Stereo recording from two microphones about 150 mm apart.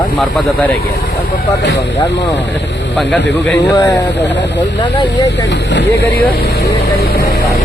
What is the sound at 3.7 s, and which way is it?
Speech, 25° left (ahead or behind).